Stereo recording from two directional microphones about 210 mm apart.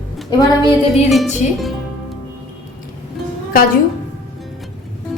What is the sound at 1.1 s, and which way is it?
Speech, centre (ahead or behind).